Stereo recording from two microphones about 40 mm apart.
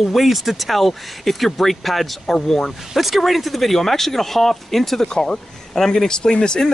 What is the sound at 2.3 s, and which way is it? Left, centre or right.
Speech, centre.